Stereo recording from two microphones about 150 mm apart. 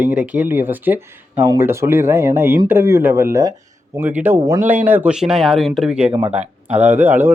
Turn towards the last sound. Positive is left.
turn(degrees=-15)  # may be behind; listen again after turning